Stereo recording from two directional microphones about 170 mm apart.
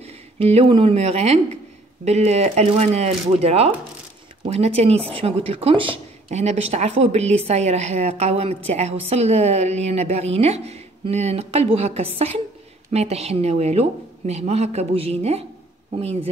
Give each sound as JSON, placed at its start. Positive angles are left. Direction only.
{"t": 0.0, "sound": "speech", "side_deg": -35}